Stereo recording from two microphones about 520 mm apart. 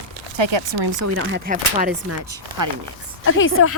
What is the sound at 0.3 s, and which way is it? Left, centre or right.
Speech, right.